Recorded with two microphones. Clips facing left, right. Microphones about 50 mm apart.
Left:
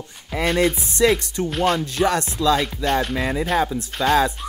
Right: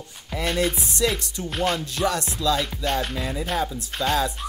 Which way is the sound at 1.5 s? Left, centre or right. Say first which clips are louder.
Left 4 dB; centre.